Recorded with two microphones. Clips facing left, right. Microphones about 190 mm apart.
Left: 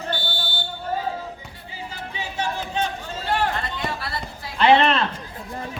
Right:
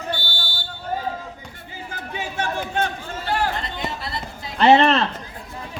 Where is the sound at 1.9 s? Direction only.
50° right (ahead or behind).